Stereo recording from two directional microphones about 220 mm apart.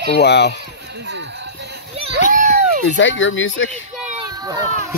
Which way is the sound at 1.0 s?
50° right (ahead or behind).